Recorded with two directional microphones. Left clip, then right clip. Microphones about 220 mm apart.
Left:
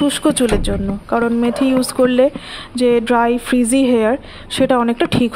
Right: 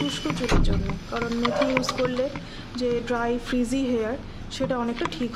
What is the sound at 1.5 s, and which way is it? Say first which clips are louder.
A woman's voice: left 6 dB; 35° left (ahead or behind).